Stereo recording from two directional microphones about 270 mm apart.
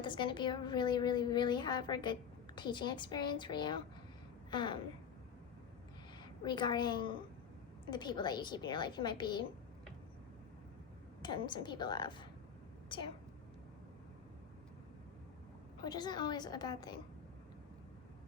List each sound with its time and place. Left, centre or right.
0.0 s a woman's voice: centre
6.2 s a woman's voice: centre
11.2 s a woman's voice: centre
15.8 s a woman's voice: centre